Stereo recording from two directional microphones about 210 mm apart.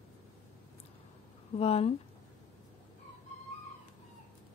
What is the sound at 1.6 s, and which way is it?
Speech, 30° left (ahead or behind).